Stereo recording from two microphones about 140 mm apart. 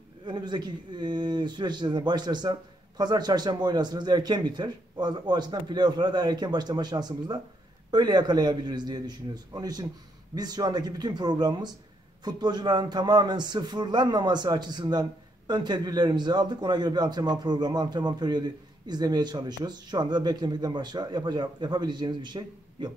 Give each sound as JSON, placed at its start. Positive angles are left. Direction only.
{"t": 0.2, "sound": "a man's voice", "side_deg": -35}